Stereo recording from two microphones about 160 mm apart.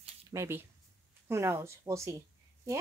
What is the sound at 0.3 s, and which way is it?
Speech, 15° right (ahead or behind).